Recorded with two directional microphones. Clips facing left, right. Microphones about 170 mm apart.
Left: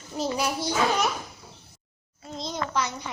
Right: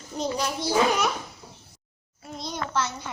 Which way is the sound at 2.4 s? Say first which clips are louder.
Even; 20° left (ahead or behind).